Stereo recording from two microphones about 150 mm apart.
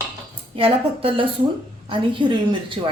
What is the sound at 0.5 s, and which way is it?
A woman's voice, 35° right (ahead or behind).